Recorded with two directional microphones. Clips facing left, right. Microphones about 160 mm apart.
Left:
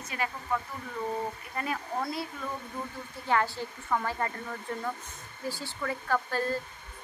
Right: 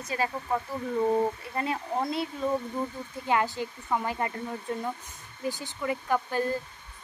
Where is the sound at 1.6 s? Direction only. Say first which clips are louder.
Right 3 dB; 25° right (ahead or behind).